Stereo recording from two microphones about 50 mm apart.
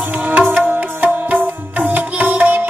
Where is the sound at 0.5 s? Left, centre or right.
Right.